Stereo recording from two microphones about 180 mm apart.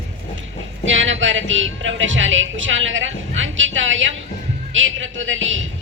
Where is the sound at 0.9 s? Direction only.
90° right.